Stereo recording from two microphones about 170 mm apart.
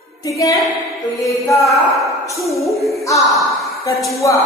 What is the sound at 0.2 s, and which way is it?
Speech, 20° left (ahead or behind).